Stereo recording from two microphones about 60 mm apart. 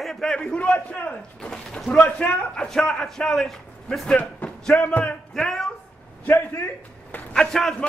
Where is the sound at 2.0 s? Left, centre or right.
Left.